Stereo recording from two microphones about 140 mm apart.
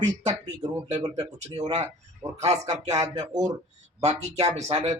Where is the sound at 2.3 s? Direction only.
50° right (ahead or behind).